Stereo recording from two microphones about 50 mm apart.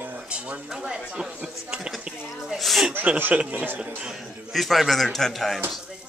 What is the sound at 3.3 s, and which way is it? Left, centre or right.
Speech, right.